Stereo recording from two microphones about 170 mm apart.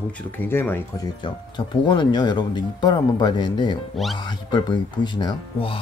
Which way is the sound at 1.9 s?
25° left (ahead or behind).